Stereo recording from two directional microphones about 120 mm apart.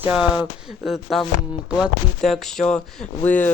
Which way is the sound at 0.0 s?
10° right (ahead or behind).